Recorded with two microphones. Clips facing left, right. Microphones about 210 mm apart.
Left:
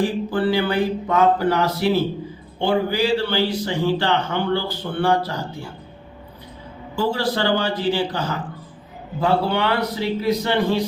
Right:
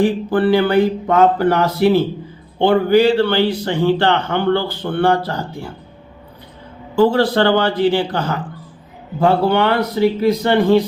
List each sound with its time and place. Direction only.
0.3 s a man's voice: 60° right (ahead or behind)
6.9 s a man's voice: 60° right (ahead or behind)